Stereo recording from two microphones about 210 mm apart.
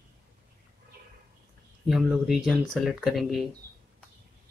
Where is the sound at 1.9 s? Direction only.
Centre (ahead or behind).